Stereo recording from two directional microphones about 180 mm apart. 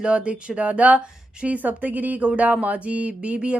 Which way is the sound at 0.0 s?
5° right (ahead or behind).